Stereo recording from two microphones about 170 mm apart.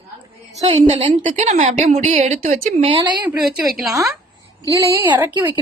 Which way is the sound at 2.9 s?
25° right (ahead or behind).